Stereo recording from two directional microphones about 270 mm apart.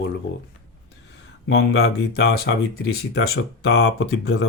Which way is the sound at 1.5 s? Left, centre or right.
Left.